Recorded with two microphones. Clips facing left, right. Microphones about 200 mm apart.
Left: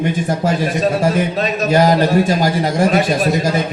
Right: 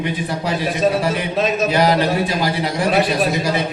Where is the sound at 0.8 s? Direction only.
Centre (ahead or behind).